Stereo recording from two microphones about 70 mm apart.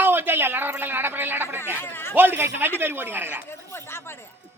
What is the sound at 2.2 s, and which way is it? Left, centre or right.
Speech, right.